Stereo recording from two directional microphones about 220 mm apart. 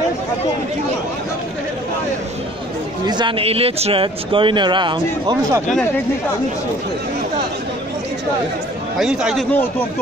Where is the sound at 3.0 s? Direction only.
20° right (ahead or behind).